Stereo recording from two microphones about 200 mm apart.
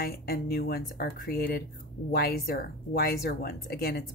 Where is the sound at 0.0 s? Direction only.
50° left (ahead or behind).